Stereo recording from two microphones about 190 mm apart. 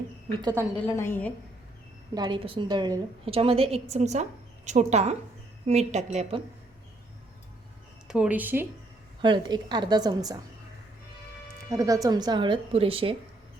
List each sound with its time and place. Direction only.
0.4 s a woman's voice: 15° right (ahead or behind)
0.9 s a woman's voice: 10° left (ahead or behind)
2.1 s a woman's voice: 25° right (ahead or behind)
8.0 s speech: 5° right (ahead or behind)
9.2 s speech: 25° right (ahead or behind)
11.7 s speech: 15° right (ahead or behind)